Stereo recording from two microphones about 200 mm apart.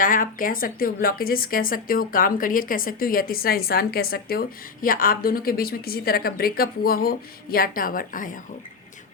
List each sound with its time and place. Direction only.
0.0 s speech: 45° left (ahead or behind)